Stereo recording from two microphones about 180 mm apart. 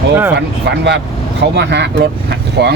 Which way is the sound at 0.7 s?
75° right (ahead or behind).